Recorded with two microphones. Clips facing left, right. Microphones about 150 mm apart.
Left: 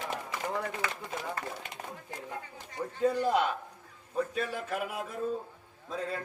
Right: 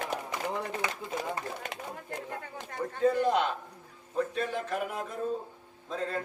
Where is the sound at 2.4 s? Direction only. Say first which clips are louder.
Right 3 dB; 55° right (ahead or behind).